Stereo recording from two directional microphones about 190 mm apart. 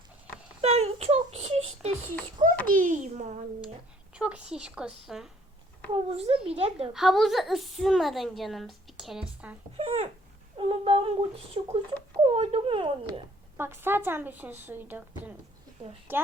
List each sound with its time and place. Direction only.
0.6 s a sound: 35° right (ahead or behind)
2.7 s a sound: 40° right (ahead or behind)
4.1 s a woman's voice: 5° right (ahead or behind)
5.9 s speech: 30° right (ahead or behind)
6.9 s a woman's voice: centre (ahead or behind)
9.7 s speech: 30° right (ahead or behind)
13.6 s a woman's voice: 10° right (ahead or behind)